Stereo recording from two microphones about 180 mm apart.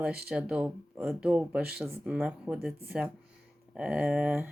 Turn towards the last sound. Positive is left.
turn(degrees=-10)  # may be behind; listen again after turning